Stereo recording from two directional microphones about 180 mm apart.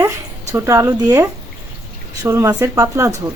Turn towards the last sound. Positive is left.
turn(degrees=-15)  # may be behind; listen again after turning